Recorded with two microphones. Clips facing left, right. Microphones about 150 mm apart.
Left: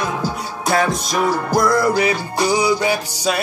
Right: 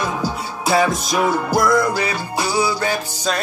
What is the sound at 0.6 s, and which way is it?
Music, 5° right (ahead or behind).